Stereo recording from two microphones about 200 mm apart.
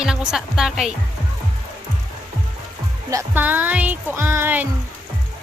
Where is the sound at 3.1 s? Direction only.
10° right (ahead or behind).